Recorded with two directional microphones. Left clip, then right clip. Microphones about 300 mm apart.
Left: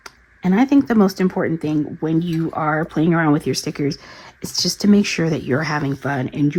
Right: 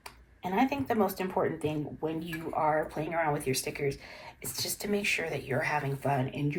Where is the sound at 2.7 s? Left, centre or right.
Left.